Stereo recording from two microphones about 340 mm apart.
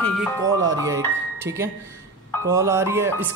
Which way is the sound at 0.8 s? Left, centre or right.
Centre.